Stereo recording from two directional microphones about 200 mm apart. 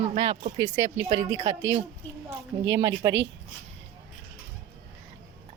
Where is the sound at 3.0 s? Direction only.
20° right (ahead or behind).